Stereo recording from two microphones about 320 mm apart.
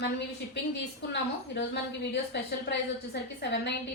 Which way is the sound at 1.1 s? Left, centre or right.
Left.